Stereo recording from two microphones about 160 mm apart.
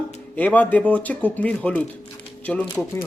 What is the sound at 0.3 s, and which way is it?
Speech, 10° left (ahead or behind).